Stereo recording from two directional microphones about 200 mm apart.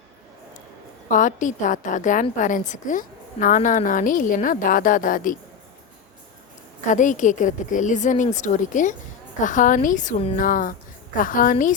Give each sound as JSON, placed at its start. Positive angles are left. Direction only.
{"t": 1.1, "sound": "a woman's voice", "side_deg": 40}
{"t": 6.9, "sound": "a woman's voice", "side_deg": 40}